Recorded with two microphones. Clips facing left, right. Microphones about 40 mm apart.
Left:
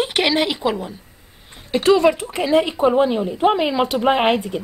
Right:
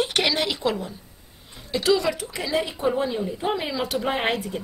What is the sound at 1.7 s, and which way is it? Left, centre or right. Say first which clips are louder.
A woman's voice: left 7 dB; left.